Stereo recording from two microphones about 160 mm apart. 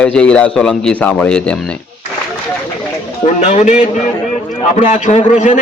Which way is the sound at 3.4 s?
45° left (ahead or behind).